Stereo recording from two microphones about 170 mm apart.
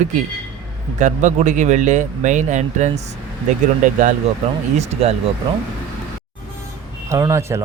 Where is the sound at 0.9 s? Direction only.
45° right (ahead or behind).